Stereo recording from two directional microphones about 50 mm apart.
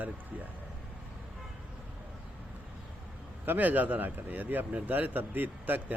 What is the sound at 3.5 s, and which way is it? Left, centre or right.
Speech, right.